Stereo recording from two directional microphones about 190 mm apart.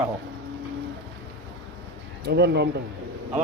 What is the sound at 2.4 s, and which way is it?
Speech, 65° right (ahead or behind).